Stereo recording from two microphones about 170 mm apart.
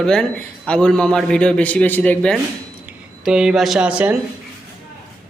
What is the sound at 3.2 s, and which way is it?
Speech, 5° right (ahead or behind).